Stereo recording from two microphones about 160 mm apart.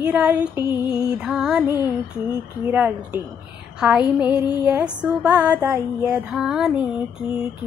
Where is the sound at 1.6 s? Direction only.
15° right (ahead or behind).